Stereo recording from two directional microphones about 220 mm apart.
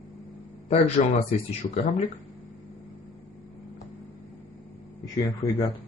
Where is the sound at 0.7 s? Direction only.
25° left (ahead or behind).